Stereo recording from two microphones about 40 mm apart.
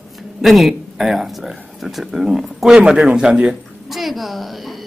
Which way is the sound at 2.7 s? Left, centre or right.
Right.